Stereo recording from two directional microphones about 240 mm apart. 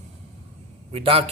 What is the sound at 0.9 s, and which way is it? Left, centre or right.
Speech, right.